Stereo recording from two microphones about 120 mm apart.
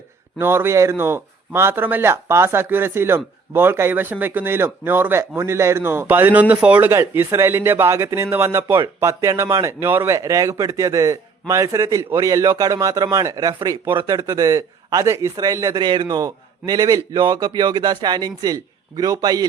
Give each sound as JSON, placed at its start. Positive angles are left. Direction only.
{"t": 0.3, "sound": "a man's voice", "side_deg": -20}